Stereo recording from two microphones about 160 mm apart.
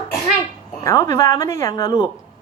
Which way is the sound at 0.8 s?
20° left (ahead or behind).